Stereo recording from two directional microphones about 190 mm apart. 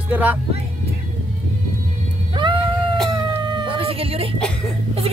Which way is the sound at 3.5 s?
25° right (ahead or behind).